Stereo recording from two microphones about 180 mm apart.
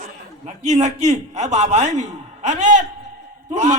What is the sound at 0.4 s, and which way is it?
A man's voice, 40° right (ahead or behind).